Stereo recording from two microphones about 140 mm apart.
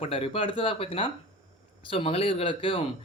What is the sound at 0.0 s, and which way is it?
Speech, 45° left (ahead or behind).